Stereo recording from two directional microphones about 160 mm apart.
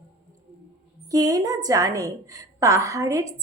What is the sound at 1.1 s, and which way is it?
A woman's voice, 20° right (ahead or behind).